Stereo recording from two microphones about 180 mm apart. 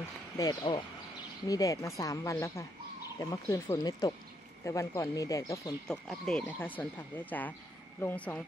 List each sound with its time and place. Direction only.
0.4 s speech: 25° left (ahead or behind)
5.9 s speech: 5° left (ahead or behind)